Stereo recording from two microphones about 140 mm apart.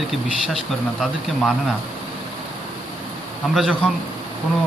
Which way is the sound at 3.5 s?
Centre (ahead or behind).